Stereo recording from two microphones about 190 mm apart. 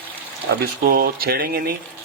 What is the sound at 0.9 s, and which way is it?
Speech, 55° right (ahead or behind).